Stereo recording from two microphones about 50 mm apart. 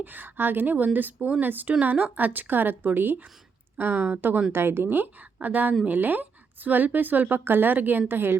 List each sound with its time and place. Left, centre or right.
0.0 s a woman's voice: right
4.5 s a woman's voice: right